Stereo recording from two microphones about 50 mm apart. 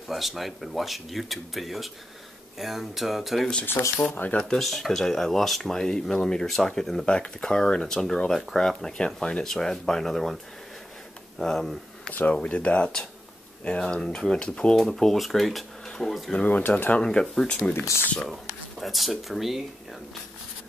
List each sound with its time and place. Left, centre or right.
0.1 s speech: centre
4.0 s speech: left
4.6 s speech: centre
9.4 s speech: centre
11.3 s speech: centre
12.1 s speech: left
14.8 s speech: centre
16.3 s speech: left
17.0 s speech: centre
18.2 s speech: centre